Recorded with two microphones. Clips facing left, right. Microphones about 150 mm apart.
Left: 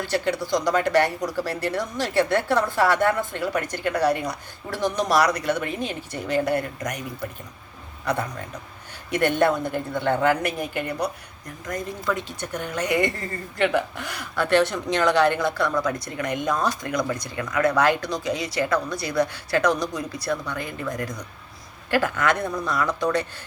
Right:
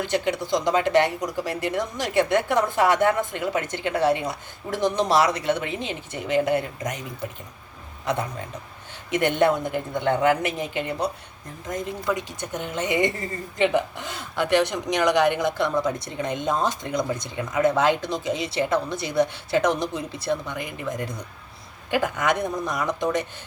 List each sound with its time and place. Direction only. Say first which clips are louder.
0.0 s speech: even; 20° right (ahead or behind)
9.0 s speech: even; 20° right (ahead or behind)